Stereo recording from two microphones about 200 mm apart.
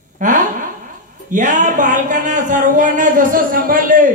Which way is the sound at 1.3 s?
40° right (ahead or behind).